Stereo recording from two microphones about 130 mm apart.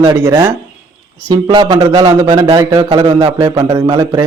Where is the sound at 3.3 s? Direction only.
25° right (ahead or behind).